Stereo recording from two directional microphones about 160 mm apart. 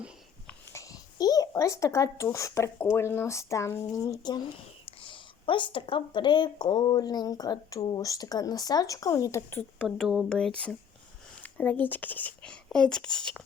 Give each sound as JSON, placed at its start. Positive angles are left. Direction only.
{"t": 0.4, "sound": "a sound", "side_deg": 20}
{"t": 2.9, "sound": "speech", "side_deg": 15}
{"t": 9.8, "sound": "speech", "side_deg": 0}